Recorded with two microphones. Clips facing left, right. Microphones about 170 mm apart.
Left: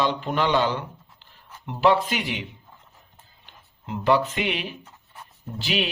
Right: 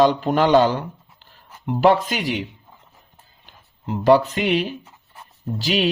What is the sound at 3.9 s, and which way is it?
Speech, 40° right (ahead or behind).